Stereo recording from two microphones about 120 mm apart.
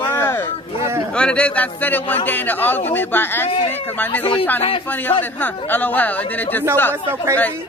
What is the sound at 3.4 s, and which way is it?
Speech, 50° left (ahead or behind).